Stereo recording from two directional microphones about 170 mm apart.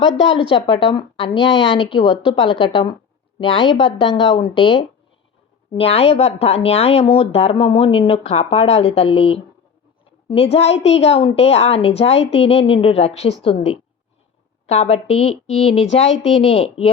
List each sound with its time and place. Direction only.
0.2 s a woman's voice: 30° left (ahead or behind)